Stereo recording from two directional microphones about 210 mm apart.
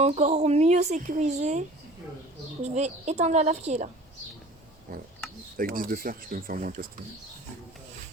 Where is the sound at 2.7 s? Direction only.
30° right (ahead or behind).